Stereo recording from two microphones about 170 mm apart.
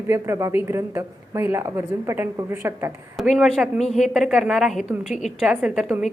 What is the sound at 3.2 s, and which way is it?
A woman's voice, centre (ahead or behind).